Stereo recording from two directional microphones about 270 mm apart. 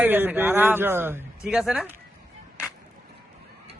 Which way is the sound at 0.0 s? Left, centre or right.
Centre.